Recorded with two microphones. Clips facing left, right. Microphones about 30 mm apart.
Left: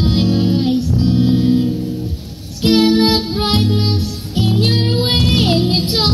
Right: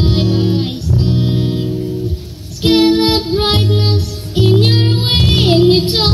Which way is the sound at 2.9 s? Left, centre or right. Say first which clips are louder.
Right 1 dB; right.